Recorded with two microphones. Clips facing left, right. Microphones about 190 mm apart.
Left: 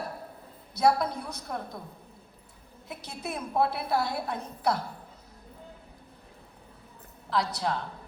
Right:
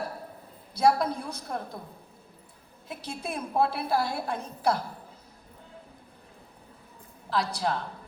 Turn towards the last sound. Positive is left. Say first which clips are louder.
# right 1 dB
turn(degrees=-30)  # may be behind; listen again after turning